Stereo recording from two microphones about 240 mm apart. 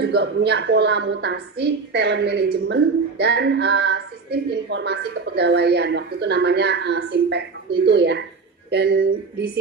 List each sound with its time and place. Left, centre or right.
0.0 s a woman's voice: right